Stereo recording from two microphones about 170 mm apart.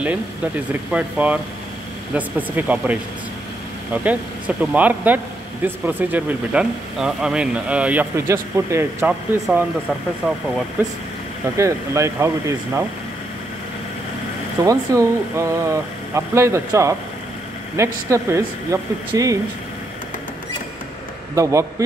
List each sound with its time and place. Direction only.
0.9 s speech: 5° right (ahead or behind)
10.8 s speech: 10° right (ahead or behind)
14.6 s speech: 20° right (ahead or behind)
21.4 s speech: 20° right (ahead or behind)